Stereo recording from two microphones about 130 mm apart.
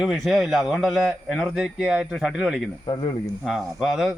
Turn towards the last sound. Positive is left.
turn(degrees=0)  # may be behind; listen again after turning